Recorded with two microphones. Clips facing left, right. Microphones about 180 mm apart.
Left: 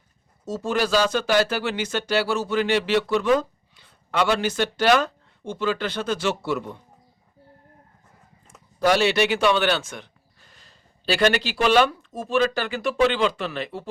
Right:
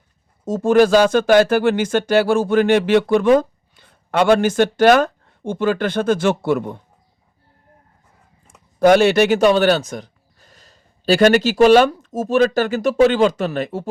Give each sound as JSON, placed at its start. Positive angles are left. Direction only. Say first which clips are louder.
{"t": 0.4, "sound": "speech", "louder": "right 11 dB", "side_deg": -50}
{"t": 8.8, "sound": "speech", "louder": "right 7 dB", "side_deg": -50}